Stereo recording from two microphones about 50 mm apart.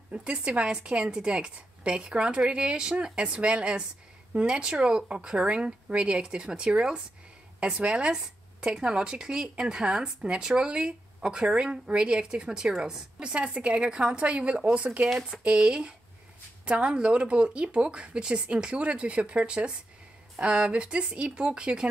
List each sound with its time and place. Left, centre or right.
0.1 s speech: right